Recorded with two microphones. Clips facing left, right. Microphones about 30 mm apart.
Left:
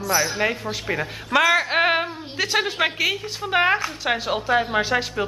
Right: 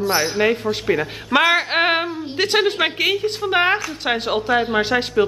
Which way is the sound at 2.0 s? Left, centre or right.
Centre.